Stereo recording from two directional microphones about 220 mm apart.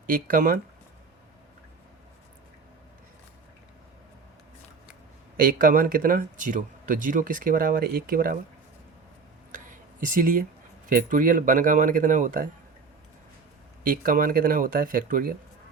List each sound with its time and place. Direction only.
0.1 s speech: 40° right (ahead or behind)
5.4 s speech: 40° right (ahead or behind)
10.0 s speech: 40° right (ahead or behind)
13.8 s speech: 40° right (ahead or behind)